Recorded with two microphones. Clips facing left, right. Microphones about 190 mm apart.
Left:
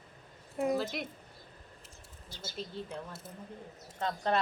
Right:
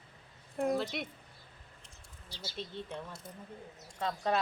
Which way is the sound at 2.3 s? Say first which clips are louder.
Left 1 dB; 50° left (ahead or behind).